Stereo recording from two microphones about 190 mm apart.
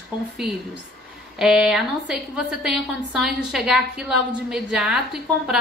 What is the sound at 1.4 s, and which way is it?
A woman's voice, centre (ahead or behind).